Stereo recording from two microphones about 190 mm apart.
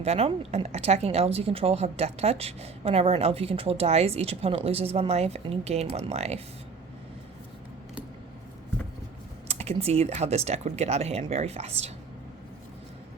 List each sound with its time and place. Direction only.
0.0 s speech: 35° right (ahead or behind)
9.5 s speech: 35° right (ahead or behind)